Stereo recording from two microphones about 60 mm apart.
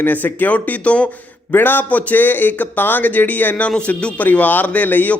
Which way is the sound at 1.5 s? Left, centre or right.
Left.